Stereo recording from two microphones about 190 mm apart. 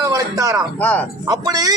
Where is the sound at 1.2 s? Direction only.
20° right (ahead or behind).